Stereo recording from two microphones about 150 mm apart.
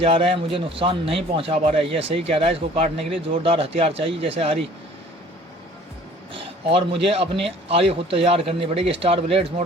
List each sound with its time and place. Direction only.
0.0 s speech: 40° right (ahead or behind)
6.3 s speech: 35° right (ahead or behind)